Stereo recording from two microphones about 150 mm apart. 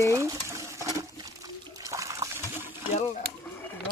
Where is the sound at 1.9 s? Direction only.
20° right (ahead or behind).